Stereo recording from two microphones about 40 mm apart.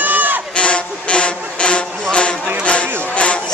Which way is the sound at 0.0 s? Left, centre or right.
Right.